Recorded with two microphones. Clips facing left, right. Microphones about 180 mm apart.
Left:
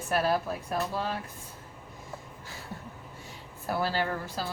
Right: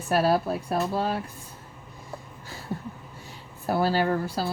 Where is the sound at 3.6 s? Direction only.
35° right (ahead or behind).